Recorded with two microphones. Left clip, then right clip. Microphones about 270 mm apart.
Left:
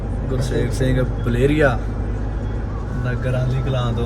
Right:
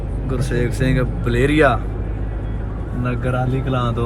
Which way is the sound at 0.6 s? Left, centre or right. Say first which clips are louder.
Right 2 dB; centre.